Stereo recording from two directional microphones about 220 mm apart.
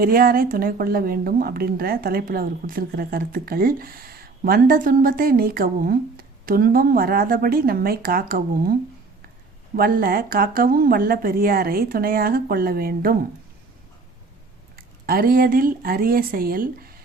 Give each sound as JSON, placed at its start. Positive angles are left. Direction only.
{"t": 0.0, "sound": "speech", "side_deg": -40}
{"t": 15.0, "sound": "speech", "side_deg": -40}